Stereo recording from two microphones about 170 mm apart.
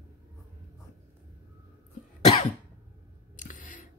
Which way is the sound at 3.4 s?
50° left (ahead or behind).